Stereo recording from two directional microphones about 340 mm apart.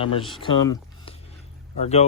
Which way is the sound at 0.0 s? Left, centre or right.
Centre.